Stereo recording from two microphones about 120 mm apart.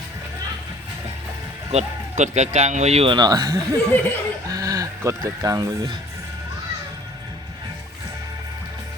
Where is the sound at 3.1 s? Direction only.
35° right (ahead or behind).